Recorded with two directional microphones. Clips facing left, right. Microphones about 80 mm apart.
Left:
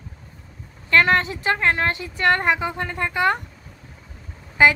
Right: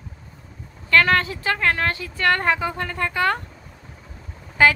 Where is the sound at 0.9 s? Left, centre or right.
Left.